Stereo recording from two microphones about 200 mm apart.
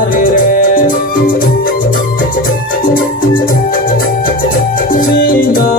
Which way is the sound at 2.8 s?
45° left (ahead or behind).